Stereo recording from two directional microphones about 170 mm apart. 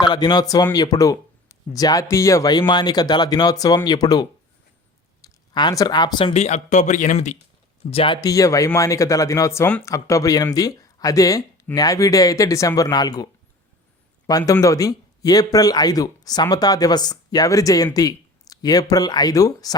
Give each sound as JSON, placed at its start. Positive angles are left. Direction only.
{"t": 0.0, "sound": "speech", "side_deg": 25}